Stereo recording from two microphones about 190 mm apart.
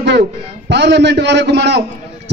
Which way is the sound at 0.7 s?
65° right (ahead or behind).